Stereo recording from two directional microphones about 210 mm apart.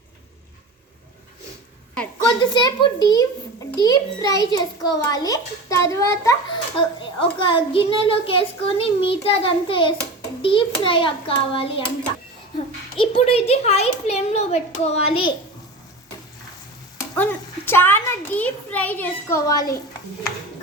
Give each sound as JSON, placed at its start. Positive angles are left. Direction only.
{"t": 2.2, "sound": "a child's voice", "side_deg": 20}
{"t": 13.0, "sound": "a child's voice", "side_deg": 25}
{"t": 17.2, "sound": "a child's voice", "side_deg": 10}